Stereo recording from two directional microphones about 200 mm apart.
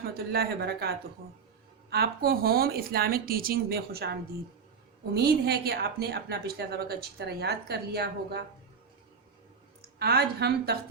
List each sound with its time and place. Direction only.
0.0 s a woman's voice: 50° right (ahead or behind)
10.0 s a woman's voice: 55° right (ahead or behind)